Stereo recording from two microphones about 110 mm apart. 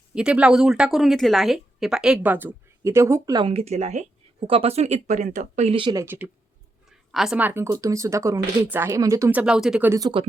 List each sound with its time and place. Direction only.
0.1 s speech: 10° right (ahead or behind); by 3.3 s 25° right (ahead or behind)
3.5 s speech: 70° right (ahead or behind); by 5.7 s 90° right
6.1 s speech: 15° right (ahead or behind)
7.1 s a woman's voice: 5° right (ahead or behind)
7.3 s speech: 20° right (ahead or behind)
9.3 s speech: 10° right (ahead or behind)
10.0 s speech: 45° right (ahead or behind)